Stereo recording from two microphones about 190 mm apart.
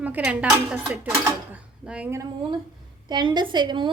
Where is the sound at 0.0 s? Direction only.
10° right (ahead or behind).